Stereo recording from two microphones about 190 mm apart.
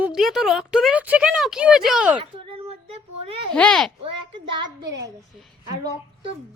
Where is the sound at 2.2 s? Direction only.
30° right (ahead or behind).